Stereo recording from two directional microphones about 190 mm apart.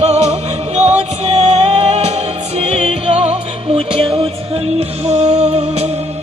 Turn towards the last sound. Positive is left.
turn(degrees=-35)  # may be behind; listen again after turning